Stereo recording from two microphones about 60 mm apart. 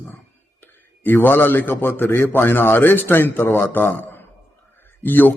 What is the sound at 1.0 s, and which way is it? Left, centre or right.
A man's voice, left.